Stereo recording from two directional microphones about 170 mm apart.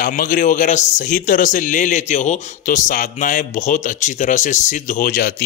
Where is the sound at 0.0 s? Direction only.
55° left (ahead or behind).